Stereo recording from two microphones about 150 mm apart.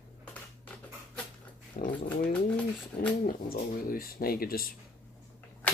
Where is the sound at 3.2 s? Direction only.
70° left (ahead or behind).